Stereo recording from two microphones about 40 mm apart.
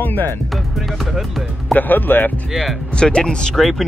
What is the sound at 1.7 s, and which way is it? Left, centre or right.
Speech, left.